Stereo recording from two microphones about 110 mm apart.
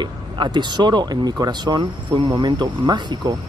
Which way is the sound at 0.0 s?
40° right (ahead or behind).